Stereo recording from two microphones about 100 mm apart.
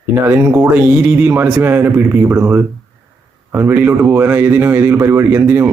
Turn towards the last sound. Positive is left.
turn(degrees=-20)  # may be behind; listen again after turning